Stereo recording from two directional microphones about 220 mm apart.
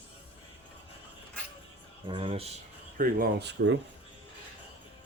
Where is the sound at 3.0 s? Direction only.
40° right (ahead or behind).